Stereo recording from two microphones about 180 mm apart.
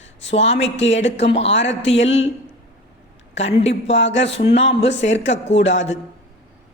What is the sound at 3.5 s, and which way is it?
Speech, 35° left (ahead or behind).